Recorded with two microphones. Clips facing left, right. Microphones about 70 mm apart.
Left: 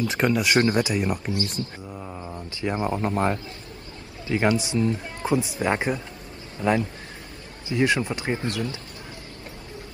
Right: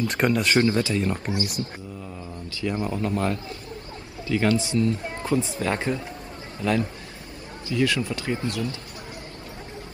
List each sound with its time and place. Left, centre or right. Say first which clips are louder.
0.1 s speech: even; centre
0.6 s speech: even; left
1.4 s speech: even; left
2.0 s a sound: left 2 dB; left
4.3 s speech: even; left
7.6 s speech: left 1 dB; left